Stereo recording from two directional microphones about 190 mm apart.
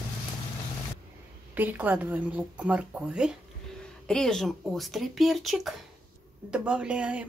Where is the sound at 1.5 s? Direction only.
10° right (ahead or behind).